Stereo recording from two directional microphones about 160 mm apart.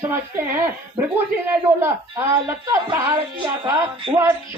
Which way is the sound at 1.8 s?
15° right (ahead or behind).